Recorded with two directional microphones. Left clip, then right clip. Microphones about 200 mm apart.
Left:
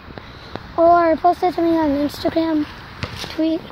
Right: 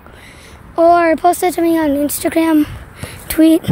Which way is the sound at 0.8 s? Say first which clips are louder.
Right 3 dB; 45° right (ahead or behind).